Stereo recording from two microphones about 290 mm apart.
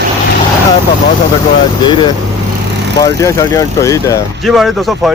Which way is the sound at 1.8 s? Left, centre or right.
Centre.